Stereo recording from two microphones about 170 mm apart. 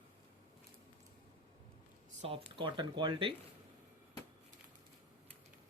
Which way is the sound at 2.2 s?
30° right (ahead or behind).